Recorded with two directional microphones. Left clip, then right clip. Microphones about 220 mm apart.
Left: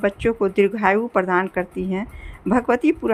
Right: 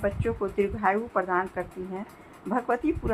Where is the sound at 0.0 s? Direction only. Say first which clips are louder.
Left 8 dB; 50° left (ahead or behind).